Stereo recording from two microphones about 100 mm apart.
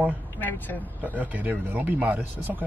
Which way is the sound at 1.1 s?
15° right (ahead or behind).